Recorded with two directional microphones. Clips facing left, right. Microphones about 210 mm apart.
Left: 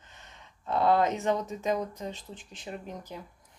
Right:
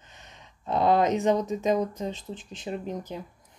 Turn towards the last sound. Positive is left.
turn(degrees=-20)  # may be behind; listen again after turning